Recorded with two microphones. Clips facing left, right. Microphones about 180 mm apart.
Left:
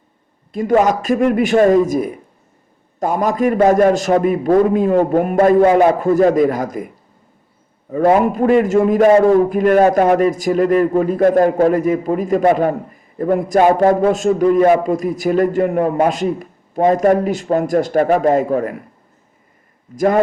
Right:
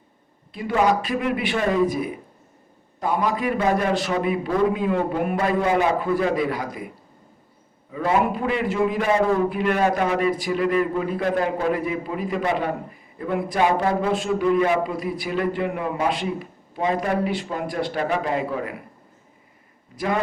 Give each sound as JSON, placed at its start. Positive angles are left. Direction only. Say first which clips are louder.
{"t": 0.5, "sound": "a man's voice", "louder": "left 6 dB", "side_deg": 45}
{"t": 7.9, "sound": "a man's voice", "louder": "left 8 dB", "side_deg": 45}
{"t": 20.0, "sound": "a man's voice", "louder": "left 10 dB", "side_deg": 45}